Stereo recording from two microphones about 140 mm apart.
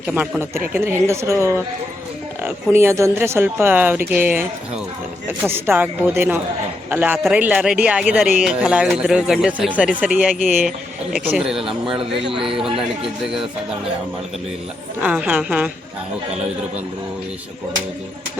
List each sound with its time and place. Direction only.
0.1 s speech: 15° right (ahead or behind)
12.3 s speech: 40° right (ahead or behind)
15.0 s speech: 10° right (ahead or behind)